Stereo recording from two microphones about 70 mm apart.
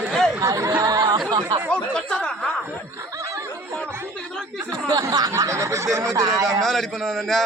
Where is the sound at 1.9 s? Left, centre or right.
Centre.